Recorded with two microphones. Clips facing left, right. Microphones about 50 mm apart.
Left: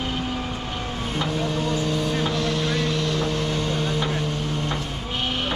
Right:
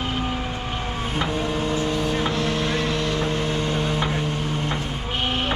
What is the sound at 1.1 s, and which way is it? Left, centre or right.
Vehicle, centre.